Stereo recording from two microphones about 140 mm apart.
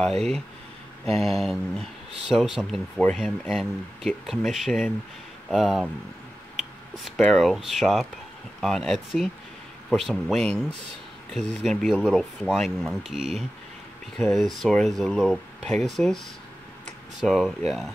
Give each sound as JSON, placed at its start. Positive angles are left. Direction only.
{"t": 0.0, "sound": "speech", "side_deg": 5}
{"t": 7.2, "sound": "speech", "side_deg": 5}
{"t": 17.2, "sound": "speech", "side_deg": 0}